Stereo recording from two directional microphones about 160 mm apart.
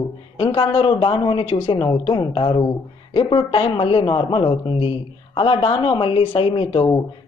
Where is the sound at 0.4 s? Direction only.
35° left (ahead or behind).